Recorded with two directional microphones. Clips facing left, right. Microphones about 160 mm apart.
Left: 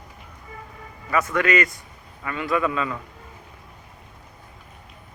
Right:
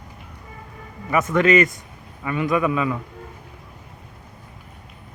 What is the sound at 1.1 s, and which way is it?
A man's voice, 20° right (ahead or behind).